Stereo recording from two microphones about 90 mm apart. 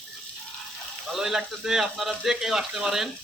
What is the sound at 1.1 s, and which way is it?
Speech, 5° right (ahead or behind).